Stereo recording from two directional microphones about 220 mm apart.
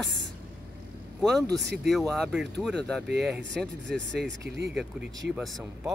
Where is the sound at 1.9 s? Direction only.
Centre (ahead or behind).